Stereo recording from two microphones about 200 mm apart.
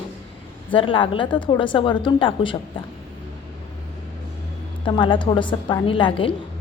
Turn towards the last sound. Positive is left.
turn(degrees=25)  # may be behind; listen again after turning